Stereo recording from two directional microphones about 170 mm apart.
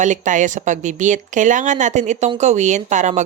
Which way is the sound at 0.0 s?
45° right (ahead or behind).